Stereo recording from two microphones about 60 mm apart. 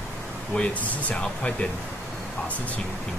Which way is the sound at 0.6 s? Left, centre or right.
Centre.